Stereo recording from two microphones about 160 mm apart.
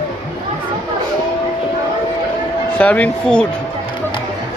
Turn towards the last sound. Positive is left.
turn(degrees=10)  # may be behind; listen again after turning